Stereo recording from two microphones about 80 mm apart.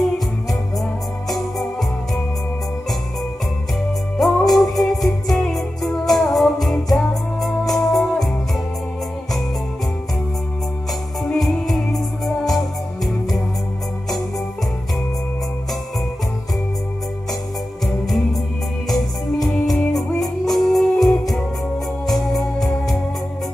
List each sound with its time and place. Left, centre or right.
1.3 s organ: centre
4.2 s music: centre
11.3 s music: centre
17.8 s music: centre
19.7 s music: centre
22.0 s organ: centre